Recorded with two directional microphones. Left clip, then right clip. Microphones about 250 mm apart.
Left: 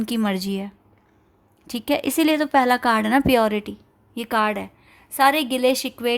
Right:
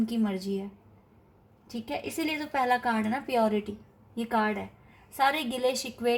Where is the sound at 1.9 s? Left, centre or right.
Left.